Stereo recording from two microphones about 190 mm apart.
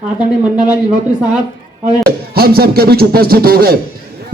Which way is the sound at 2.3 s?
55° right (ahead or behind).